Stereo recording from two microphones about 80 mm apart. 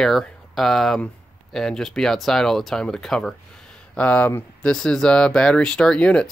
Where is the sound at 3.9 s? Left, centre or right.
Centre.